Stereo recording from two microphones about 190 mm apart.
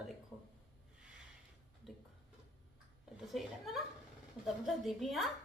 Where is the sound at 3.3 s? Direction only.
Centre (ahead or behind).